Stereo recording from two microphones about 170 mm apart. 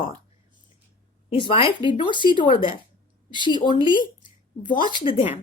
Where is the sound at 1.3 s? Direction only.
30° left (ahead or behind).